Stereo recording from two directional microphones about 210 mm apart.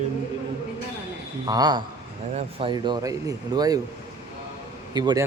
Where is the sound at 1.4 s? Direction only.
20° right (ahead or behind).